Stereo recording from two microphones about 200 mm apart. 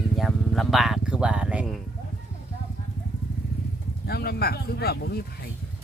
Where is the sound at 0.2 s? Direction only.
Centre (ahead or behind).